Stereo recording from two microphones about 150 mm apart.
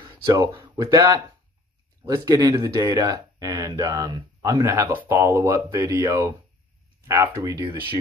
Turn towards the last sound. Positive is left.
turn(degrees=-25)  # may be behind; listen again after turning